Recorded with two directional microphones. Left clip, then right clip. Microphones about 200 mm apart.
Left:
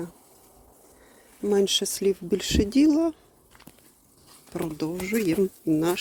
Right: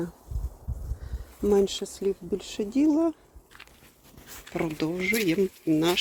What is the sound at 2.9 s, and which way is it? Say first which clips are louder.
Speech: left 1 dB; 5° left (ahead or behind).